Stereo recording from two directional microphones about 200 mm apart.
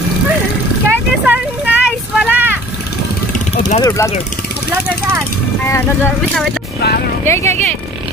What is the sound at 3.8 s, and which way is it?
Speech, 15° left (ahead or behind).